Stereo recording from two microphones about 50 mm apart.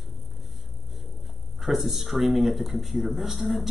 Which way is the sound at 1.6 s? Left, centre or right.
Centre.